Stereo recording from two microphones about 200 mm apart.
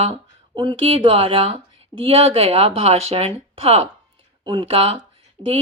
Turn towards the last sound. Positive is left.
turn(degrees=-30)  # may be behind; listen again after turning